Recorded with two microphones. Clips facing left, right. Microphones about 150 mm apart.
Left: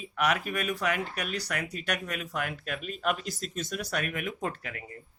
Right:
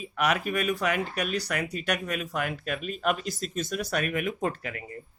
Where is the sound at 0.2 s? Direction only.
20° right (ahead or behind).